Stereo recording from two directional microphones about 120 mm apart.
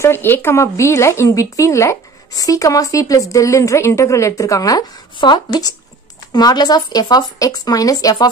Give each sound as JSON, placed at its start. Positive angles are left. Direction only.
{"t": 0.0, "sound": "speech", "side_deg": 20}